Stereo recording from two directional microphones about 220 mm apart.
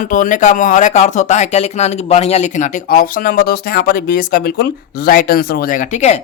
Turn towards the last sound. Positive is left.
turn(degrees=30)  # may be behind; listen again after turning